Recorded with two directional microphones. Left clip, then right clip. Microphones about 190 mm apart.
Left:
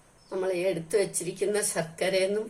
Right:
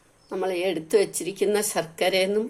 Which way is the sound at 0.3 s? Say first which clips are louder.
Right 2 dB; 45° right (ahead or behind).